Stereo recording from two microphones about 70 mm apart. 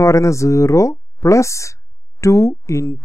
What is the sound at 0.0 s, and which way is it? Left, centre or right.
Speech, left.